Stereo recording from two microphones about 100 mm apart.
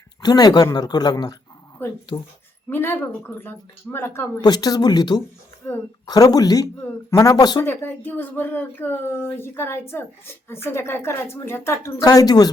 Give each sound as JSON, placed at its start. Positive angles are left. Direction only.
{"t": 0.2, "sound": "speech", "side_deg": 40}
{"t": 1.8, "sound": "speech", "side_deg": 20}
{"t": 4.4, "sound": "speech", "side_deg": 45}
{"t": 5.6, "sound": "speech", "side_deg": 20}
{"t": 6.1, "sound": "speech", "side_deg": 40}
{"t": 7.6, "sound": "speech", "side_deg": 25}
{"t": 11.9, "sound": "speech", "side_deg": 40}